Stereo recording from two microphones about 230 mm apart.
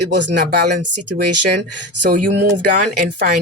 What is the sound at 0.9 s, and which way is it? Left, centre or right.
Speech, right.